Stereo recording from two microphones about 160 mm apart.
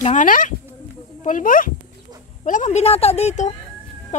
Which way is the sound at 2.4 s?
50° left (ahead or behind).